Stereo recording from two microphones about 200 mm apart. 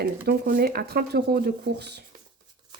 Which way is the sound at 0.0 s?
45° right (ahead or behind).